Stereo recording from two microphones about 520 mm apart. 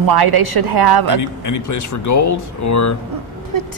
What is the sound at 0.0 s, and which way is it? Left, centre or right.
A woman's voice, right.